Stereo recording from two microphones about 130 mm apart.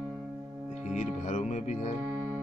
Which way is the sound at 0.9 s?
65° left (ahead or behind).